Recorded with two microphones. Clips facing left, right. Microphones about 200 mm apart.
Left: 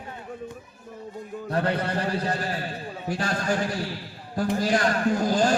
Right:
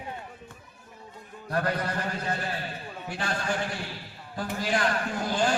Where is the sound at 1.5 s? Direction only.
30° left (ahead or behind).